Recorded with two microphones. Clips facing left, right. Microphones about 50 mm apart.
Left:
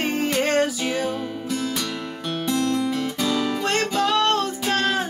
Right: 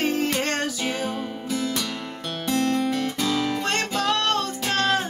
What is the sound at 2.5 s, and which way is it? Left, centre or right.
Guitar, right.